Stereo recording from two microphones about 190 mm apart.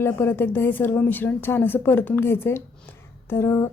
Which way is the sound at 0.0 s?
10° left (ahead or behind).